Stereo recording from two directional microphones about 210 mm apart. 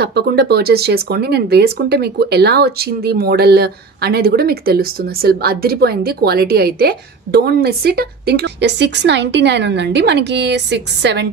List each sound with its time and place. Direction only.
0.0 s speech: 50° right (ahead or behind)